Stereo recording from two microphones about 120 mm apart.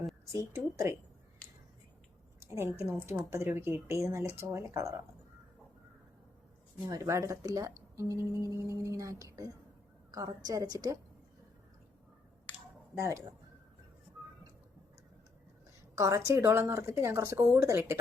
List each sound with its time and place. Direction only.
0.3 s speech: 25° right (ahead or behind)
2.4 s a sound: 20° right (ahead or behind)
3.2 s speech: 20° right (ahead or behind)
6.8 s a woman's voice: 30° right (ahead or behind)
13.0 s speech: 25° right (ahead or behind)
16.0 s speech: 25° right (ahead or behind)